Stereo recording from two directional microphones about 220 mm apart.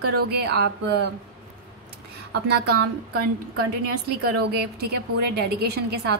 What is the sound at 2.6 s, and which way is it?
Speech, 90° right.